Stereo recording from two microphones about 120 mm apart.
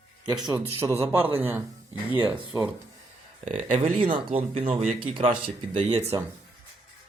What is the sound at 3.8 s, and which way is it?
Speech, 45° right (ahead or behind).